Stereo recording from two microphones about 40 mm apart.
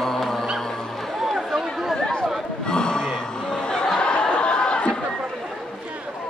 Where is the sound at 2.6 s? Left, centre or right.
Left.